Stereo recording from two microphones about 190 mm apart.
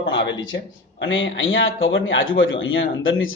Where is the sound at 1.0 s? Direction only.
90° left.